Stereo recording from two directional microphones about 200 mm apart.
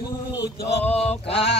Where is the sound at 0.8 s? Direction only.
5° left (ahead or behind).